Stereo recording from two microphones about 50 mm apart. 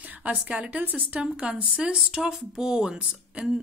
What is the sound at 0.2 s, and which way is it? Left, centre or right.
Speech, right.